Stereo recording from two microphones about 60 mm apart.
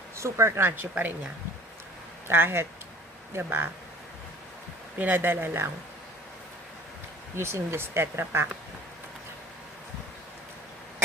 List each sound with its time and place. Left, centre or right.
0.2 s speech: right
0.8 s speech: right
2.2 s speech: right
4.9 s speech: right
7.3 s speech: right